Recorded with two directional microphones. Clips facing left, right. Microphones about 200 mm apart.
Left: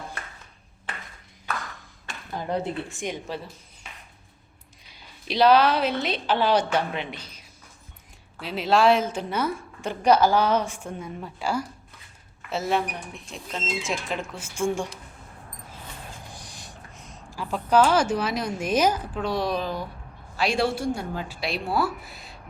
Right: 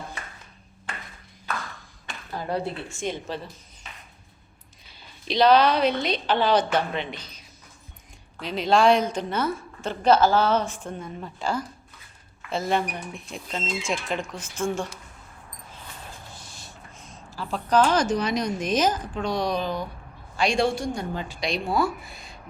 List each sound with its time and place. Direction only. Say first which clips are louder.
2.5 s a woman's voice: left 1 dB; 15° left (ahead or behind)
4.9 s a woman's voice: right 2 dB; 10° left (ahead or behind)
16.3 s a sound: left 2 dB; 15° left (ahead or behind)
17.3 s a woman's voice: left 1 dB; 10° left (ahead or behind)